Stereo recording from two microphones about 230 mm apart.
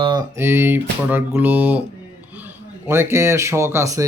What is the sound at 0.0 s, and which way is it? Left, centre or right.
Speech, centre.